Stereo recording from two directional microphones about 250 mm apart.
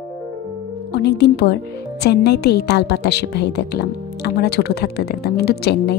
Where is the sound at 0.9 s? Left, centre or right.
Left.